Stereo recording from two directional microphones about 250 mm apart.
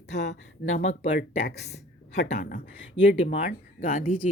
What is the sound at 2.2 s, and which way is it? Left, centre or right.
Speech, left.